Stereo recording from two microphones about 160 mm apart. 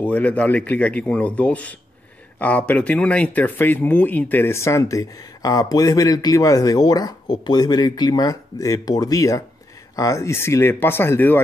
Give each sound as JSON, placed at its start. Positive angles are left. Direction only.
{"t": 0.0, "sound": "speech", "side_deg": 10}